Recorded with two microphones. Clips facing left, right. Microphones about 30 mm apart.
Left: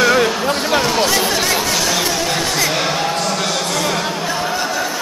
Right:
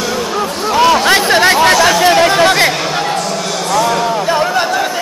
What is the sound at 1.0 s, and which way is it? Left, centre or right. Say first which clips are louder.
Chatter: right 7 dB; right.